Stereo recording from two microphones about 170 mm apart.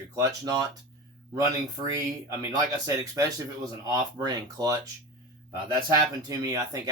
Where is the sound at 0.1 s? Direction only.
20° right (ahead or behind).